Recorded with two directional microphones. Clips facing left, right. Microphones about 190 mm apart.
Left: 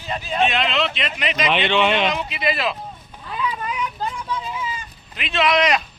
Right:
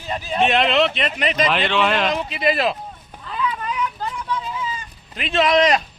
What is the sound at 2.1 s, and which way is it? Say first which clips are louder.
Speech: right 3 dB; 40° right (ahead or behind).